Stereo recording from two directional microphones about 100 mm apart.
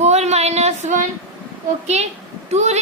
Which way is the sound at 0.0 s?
90° right.